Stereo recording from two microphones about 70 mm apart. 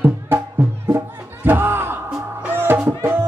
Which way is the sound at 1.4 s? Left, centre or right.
Right.